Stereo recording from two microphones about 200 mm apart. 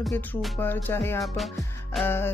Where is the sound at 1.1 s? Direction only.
Centre (ahead or behind).